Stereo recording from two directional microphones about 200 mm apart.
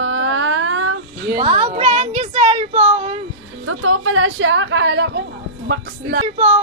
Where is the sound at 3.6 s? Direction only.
90° right; by 5.2 s 60° right (ahead or behind).